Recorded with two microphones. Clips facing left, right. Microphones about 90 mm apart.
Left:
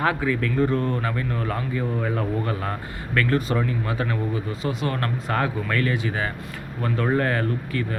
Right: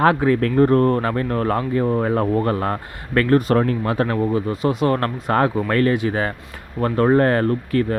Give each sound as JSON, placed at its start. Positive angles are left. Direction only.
{"t": 0.3, "sound": "speech", "side_deg": -55}
{"t": 3.3, "sound": "speech", "side_deg": -60}
{"t": 4.9, "sound": "speech", "side_deg": -40}